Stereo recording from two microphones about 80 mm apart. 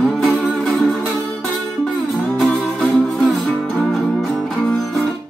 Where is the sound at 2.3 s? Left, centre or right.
Centre.